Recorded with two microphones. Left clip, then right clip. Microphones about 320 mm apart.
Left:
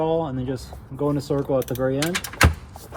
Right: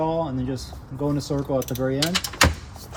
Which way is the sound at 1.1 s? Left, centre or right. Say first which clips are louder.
Left 2 dB; left.